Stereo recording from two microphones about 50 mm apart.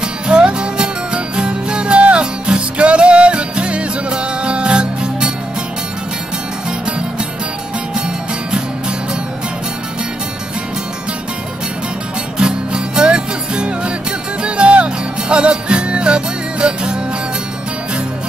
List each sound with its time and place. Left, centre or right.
0.0 s music: centre
12.4 s music: centre